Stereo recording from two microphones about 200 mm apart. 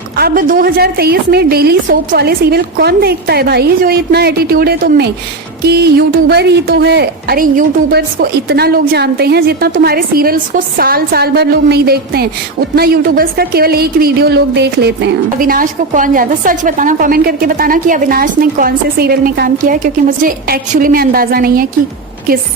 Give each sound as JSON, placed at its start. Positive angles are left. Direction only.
{"t": 0.2, "sound": "a woman's voice", "side_deg": -45}